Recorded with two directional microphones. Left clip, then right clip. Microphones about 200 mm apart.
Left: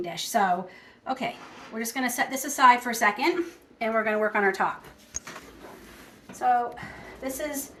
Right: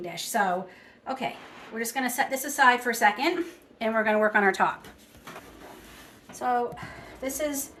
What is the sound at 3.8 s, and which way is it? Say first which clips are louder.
Speech: right 1 dB; 30° right (ahead or behind).